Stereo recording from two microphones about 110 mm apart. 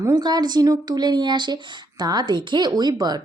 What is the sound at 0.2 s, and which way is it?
Speech, 40° right (ahead or behind).